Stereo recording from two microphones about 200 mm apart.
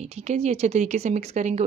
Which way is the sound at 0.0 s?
35° right (ahead or behind).